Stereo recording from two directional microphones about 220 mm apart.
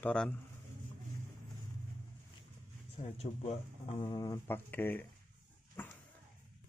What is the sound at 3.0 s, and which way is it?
Speech, 30° left (ahead or behind).